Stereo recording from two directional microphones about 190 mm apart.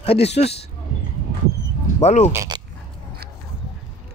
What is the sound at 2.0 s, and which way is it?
Speech, 35° left (ahead or behind).